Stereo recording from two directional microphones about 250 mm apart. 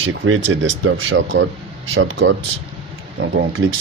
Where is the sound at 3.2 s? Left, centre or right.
Right.